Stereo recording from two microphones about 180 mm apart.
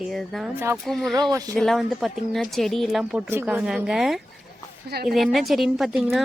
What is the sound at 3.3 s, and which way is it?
A woman's voice, 10° right (ahead or behind).